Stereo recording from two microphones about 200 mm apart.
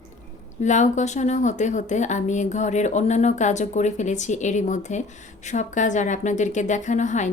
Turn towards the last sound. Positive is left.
turn(degrees=35)  # may be behind; listen again after turning